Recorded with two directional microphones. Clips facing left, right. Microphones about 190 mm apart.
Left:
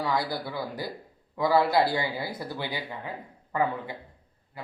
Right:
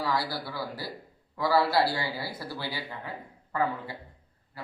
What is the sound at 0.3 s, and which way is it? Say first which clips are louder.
A man's voice: left 2 dB; 20° left (ahead or behind).